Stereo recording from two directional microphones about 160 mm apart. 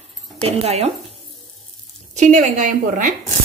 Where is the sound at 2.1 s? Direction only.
50° right (ahead or behind).